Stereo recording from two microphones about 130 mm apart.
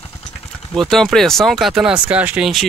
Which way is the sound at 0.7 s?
Centre (ahead or behind).